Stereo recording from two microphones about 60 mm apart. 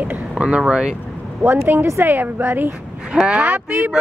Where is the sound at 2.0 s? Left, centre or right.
Right.